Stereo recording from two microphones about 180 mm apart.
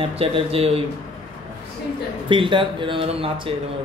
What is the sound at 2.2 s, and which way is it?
Speech, 25° right (ahead or behind).